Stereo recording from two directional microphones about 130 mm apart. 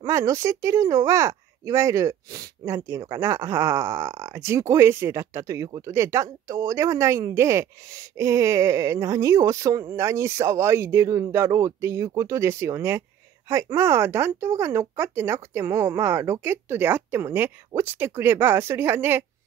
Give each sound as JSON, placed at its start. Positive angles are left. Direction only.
{"t": 0.0, "sound": "speech", "side_deg": -25}